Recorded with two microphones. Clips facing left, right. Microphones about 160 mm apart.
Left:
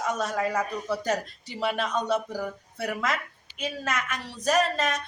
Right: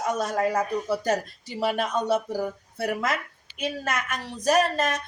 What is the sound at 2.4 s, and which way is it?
Speech, 30° right (ahead or behind).